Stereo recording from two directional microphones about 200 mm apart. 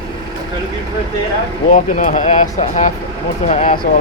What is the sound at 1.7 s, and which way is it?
Speech, 40° left (ahead or behind).